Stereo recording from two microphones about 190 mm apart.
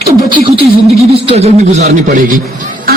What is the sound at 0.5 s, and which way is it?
A man's voice, 30° right (ahead or behind).